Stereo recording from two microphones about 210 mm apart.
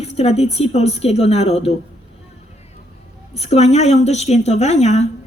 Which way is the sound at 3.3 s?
30° left (ahead or behind).